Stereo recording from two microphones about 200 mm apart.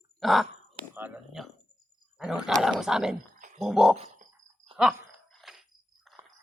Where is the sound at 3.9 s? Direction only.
35° right (ahead or behind).